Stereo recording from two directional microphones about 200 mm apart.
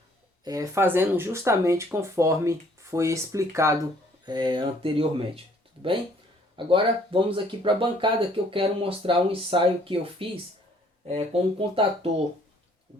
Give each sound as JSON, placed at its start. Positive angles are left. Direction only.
{"t": 0.4, "sound": "speech", "side_deg": -15}
{"t": 6.7, "sound": "speech", "side_deg": -25}